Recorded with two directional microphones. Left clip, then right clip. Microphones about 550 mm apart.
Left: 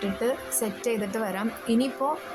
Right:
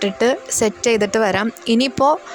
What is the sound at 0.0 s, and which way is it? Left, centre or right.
Speech, centre.